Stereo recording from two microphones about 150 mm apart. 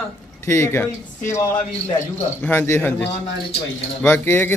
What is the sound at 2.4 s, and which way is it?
A man's voice, 15° left (ahead or behind).